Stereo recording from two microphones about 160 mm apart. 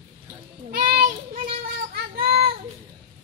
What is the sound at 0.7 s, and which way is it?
Child singing, 65° right (ahead or behind).